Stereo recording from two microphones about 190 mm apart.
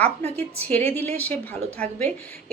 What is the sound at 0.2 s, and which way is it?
Speech, 35° right (ahead or behind).